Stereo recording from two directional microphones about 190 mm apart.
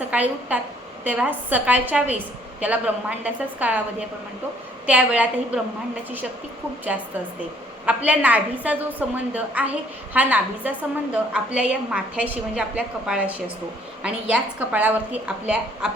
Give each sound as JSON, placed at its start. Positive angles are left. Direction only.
{"t": 0.1, "sound": "a woman's voice", "side_deg": -5}
{"t": 4.9, "sound": "a woman's voice", "side_deg": -5}
{"t": 7.9, "sound": "a woman's voice", "side_deg": -10}